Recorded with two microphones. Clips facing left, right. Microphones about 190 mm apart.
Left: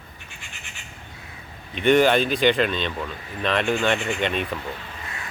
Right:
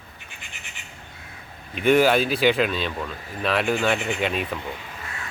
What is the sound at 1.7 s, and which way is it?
Speech, 5° right (ahead or behind).